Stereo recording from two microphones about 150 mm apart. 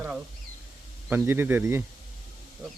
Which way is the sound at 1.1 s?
15° right (ahead or behind).